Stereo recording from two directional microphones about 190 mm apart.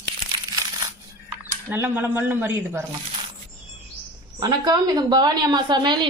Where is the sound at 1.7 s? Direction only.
10° right (ahead or behind).